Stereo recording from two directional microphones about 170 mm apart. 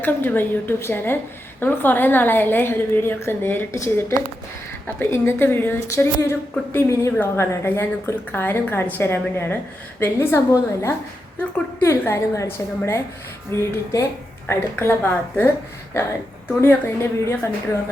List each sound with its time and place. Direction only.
0.0 s a woman's voice: 10° left (ahead or behind)